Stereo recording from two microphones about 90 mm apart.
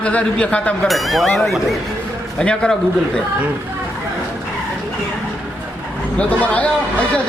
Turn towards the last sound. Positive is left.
turn(degrees=15)  # may be behind; listen again after turning